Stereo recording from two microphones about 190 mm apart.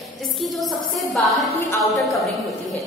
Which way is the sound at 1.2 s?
Centre (ahead or behind).